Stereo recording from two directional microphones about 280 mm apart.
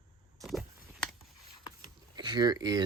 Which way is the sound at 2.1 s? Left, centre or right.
Centre.